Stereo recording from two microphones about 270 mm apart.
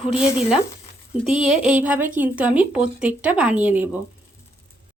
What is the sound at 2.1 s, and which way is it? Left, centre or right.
Speech, centre.